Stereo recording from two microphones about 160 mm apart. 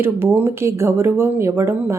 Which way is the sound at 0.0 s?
15° right (ahead or behind).